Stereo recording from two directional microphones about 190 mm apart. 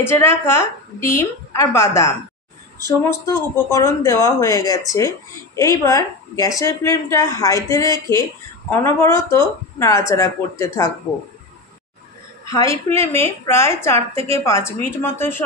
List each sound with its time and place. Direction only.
0.0 s a woman's voice: 10° left (ahead or behind)
12.4 s a woman's voice: 15° left (ahead or behind)